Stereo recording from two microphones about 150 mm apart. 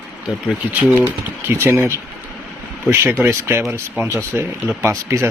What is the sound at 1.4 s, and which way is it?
Speech, 15° right (ahead or behind).